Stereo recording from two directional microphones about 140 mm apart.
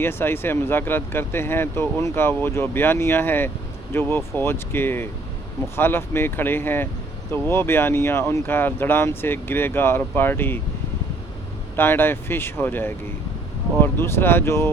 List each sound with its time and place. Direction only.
0.0 s speech: 15° left (ahead or behind)
11.8 s speech: 15° left (ahead or behind)